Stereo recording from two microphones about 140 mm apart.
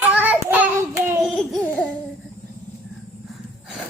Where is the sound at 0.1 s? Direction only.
10° right (ahead or behind).